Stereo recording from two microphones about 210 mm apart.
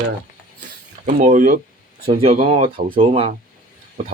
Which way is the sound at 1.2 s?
35° right (ahead or behind).